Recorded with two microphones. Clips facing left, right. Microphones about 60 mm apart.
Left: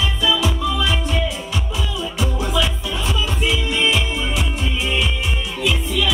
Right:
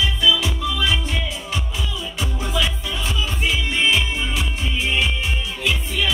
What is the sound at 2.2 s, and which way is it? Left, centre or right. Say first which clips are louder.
Music: left 3 dB; left.